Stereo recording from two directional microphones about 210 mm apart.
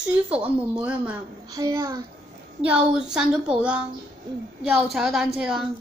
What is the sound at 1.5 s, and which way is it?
Speech, 15° right (ahead or behind).